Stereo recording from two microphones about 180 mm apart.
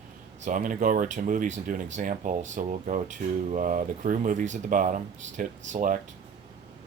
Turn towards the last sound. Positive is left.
turn(degrees=-45)  # may be behind; listen again after turning